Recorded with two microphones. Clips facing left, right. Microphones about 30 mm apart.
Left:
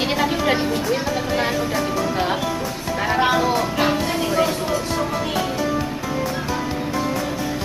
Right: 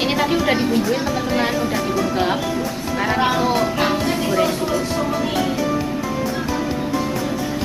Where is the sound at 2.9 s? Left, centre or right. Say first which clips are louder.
Even; centre.